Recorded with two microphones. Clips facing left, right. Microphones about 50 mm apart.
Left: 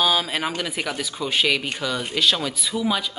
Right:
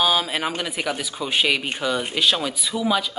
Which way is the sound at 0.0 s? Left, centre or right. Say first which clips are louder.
Right 1 dB; centre.